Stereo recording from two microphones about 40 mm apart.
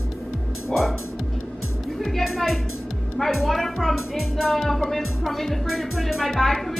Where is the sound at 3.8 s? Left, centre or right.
Centre.